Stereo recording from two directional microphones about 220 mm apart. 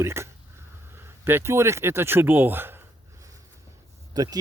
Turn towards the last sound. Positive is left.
turn(degrees=-15)  # may be behind; listen again after turning